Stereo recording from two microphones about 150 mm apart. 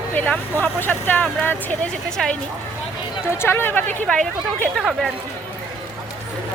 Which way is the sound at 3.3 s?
15° left (ahead or behind).